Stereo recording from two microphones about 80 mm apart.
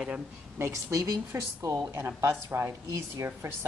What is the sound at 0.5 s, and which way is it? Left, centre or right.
Speech, right.